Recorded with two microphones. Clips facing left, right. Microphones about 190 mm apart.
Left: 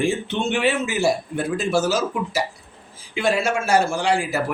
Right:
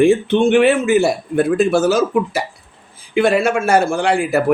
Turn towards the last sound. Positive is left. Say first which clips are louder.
# right 5 dB
turn(degrees=-55)  # may be behind; listen again after turning